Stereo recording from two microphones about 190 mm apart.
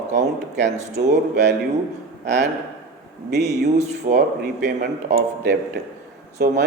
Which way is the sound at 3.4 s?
35° right (ahead or behind).